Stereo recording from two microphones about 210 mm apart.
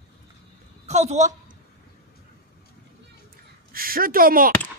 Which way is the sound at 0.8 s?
30° right (ahead or behind).